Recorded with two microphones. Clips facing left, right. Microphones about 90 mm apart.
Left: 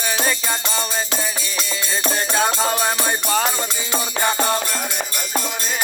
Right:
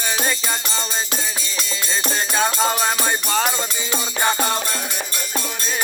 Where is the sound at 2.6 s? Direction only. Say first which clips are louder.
Even; 25° right (ahead or behind).